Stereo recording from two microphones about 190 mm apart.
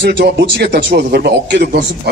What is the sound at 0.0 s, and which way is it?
A man's voice, 60° right (ahead or behind).